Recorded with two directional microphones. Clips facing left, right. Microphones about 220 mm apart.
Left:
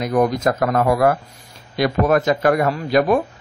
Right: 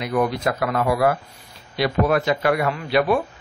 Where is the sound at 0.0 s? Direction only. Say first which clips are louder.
Left 4 dB; 45° left (ahead or behind).